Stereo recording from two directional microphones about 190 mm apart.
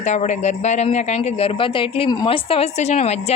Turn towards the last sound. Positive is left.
turn(degrees=35)  # may be behind; listen again after turning